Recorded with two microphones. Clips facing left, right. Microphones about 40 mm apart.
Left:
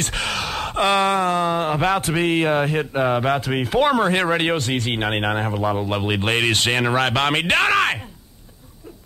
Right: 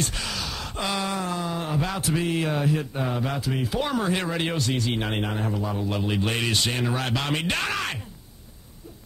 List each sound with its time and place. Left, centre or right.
0.0 s speech: left